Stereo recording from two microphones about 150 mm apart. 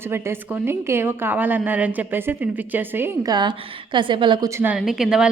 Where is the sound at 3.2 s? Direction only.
30° right (ahead or behind).